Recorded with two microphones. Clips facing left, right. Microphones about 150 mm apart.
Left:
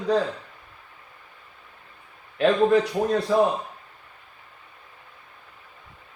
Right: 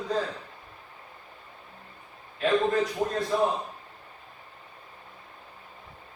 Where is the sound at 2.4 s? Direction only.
75° left (ahead or behind).